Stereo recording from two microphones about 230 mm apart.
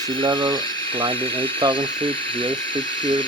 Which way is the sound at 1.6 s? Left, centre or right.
Right.